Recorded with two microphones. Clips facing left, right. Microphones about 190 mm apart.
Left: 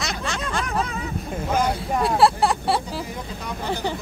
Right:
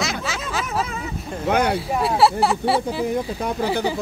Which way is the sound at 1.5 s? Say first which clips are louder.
Right 3 dB; 65° right (ahead or behind).